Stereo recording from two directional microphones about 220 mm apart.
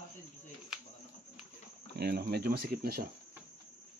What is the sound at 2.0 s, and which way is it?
Speech, 45° right (ahead or behind).